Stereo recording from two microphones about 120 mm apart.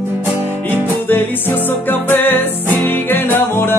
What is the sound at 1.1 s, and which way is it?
Music, 15° left (ahead or behind).